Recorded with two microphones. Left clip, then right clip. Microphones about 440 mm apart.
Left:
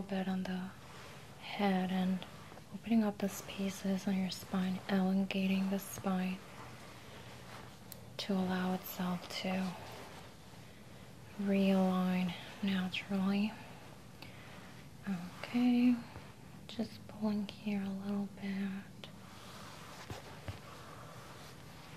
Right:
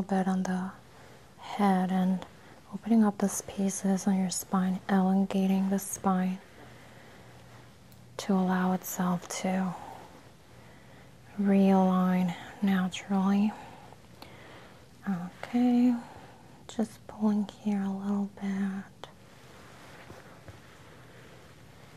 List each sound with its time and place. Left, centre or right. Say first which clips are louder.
0.1 s speech: right 9 dB; right
1.4 s speech: right 7 dB; right
8.3 s speech: right 8 dB; right
11.4 s speech: right 8 dB; right
15.0 s speech: right 6 dB; right